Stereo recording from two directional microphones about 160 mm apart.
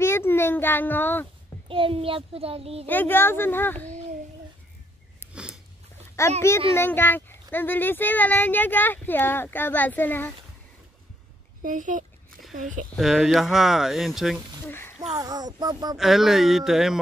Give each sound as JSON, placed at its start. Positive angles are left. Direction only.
{"t": 0.0, "sound": "speech", "side_deg": 15}
{"t": 1.7, "sound": "a child's voice", "side_deg": -35}
{"t": 2.9, "sound": "a child's voice", "side_deg": 15}
{"t": 5.2, "sound": "sniff", "side_deg": 15}
{"t": 6.2, "sound": "a child's voice", "side_deg": 20}
{"t": 11.6, "sound": "speech", "side_deg": -55}
{"t": 12.9, "sound": "speech", "side_deg": 0}
{"t": 14.7, "sound": "speech", "side_deg": 15}
{"t": 15.0, "sound": "speech", "side_deg": -20}
{"t": 16.0, "sound": "speech", "side_deg": 0}